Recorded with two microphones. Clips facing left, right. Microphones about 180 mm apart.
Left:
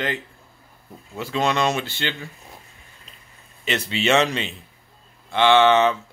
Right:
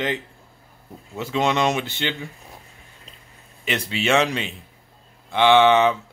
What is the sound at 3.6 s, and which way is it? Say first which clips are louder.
Speech: left 1 dB; 10° right (ahead or behind).